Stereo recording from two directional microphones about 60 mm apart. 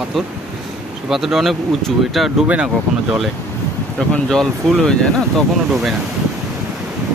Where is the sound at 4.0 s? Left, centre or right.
Centre.